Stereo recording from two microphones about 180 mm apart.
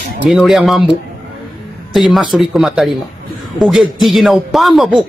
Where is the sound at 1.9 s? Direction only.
Centre (ahead or behind).